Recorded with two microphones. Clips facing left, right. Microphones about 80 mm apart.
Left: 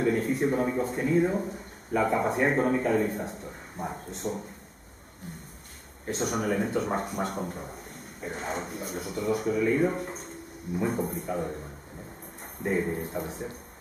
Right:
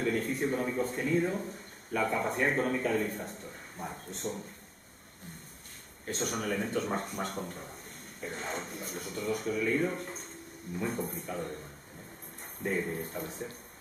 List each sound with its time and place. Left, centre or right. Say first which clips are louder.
0.0 s speech: left 5 dB; centre
0.5 s speech: left 5 dB; centre
0.7 s speech: left 3 dB; centre
1.0 s speech: left 6 dB; centre
4.1 s speech: left 3 dB; centre
6.0 s speech: left 5 dB; centre